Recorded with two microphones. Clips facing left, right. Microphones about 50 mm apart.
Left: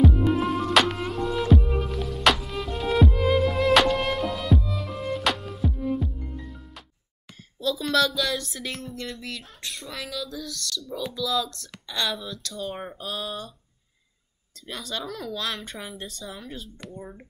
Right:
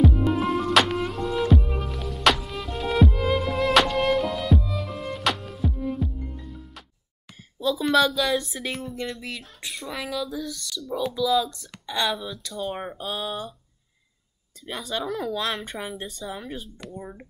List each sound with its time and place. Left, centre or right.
0.0 s music: centre
7.6 s a woman's voice: centre
9.1 s speech: centre
14.7 s speech: centre
16.5 s speech: centre